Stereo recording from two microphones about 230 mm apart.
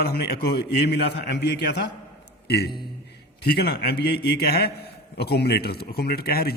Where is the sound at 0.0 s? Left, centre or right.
Left.